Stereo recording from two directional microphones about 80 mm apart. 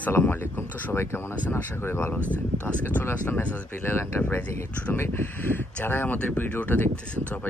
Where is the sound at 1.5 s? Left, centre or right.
Left.